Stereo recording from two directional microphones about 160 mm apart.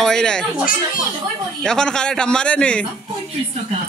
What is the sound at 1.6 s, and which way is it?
A man's voice, 5° left (ahead or behind).